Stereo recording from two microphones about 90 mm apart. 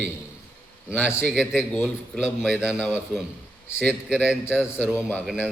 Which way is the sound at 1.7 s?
15° left (ahead or behind).